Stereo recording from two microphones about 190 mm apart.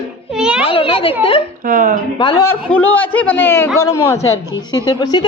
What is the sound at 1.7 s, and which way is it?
Speech, 45° right (ahead or behind).